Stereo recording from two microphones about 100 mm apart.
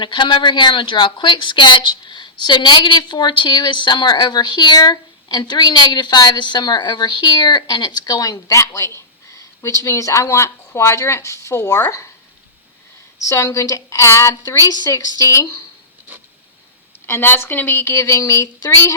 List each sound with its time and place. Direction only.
0.0 s a woman's voice: 50° left (ahead or behind); by 12.0 s 30° left (ahead or behind)
13.1 s a woman's voice: 30° left (ahead or behind)
17.1 s a woman's voice: 25° left (ahead or behind)